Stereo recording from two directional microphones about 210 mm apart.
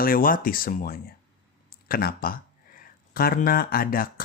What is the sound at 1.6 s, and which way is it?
Speech, 45° left (ahead or behind).